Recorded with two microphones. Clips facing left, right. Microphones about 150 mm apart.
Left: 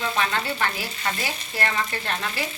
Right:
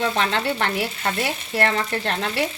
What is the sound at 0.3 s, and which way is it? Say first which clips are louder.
Speech: right 3 dB; 70° right (ahead or behind).